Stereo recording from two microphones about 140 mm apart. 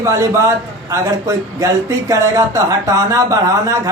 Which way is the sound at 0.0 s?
20° right (ahead or behind).